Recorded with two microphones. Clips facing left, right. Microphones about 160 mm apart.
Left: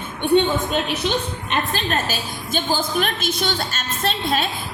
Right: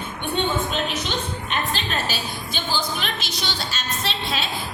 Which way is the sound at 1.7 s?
45° left (ahead or behind).